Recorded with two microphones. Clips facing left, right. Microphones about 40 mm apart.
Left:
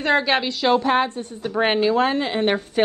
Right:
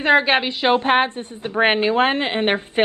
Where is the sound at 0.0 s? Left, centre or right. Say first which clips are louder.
Right 3 dB; right.